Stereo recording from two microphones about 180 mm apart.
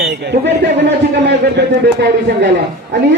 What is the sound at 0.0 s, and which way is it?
A man's voice, 70° right (ahead or behind).